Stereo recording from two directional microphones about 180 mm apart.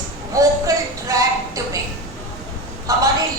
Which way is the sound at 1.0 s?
20° right (ahead or behind).